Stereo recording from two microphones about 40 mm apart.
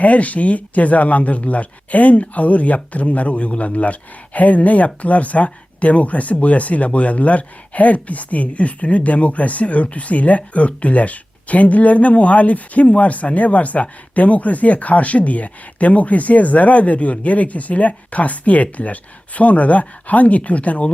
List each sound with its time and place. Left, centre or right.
0.0 s speech: left